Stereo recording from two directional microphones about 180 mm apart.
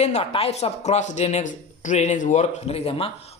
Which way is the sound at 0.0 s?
35° left (ahead or behind).